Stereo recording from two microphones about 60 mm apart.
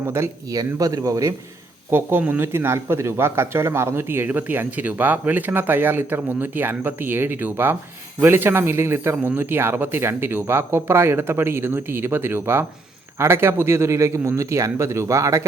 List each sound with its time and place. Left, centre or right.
0.0 s speech: right
0.5 s speech: right
1.9 s speech: right
4.3 s speech: right
9.2 s speech: right